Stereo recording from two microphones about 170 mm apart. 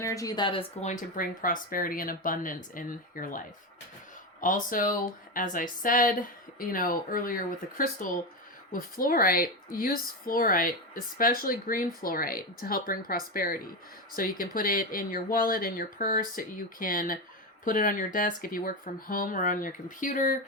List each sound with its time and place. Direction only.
0.0 s speech: 20° left (ahead or behind)
0.8 s speech: 45° left (ahead or behind)